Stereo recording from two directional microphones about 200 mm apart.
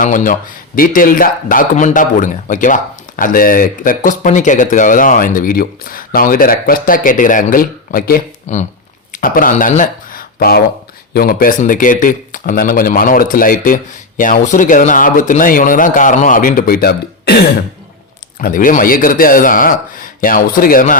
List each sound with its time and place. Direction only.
0.0 s a man's voice: 40° left (ahead or behind)